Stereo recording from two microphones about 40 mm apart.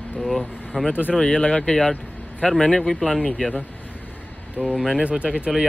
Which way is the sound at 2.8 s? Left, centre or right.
Centre.